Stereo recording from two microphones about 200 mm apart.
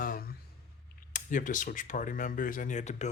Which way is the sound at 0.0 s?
45° left (ahead or behind).